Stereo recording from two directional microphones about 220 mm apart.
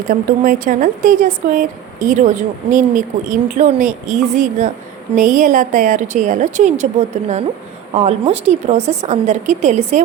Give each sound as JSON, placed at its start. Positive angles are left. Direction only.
{"t": 0.1, "sound": "speech", "side_deg": -35}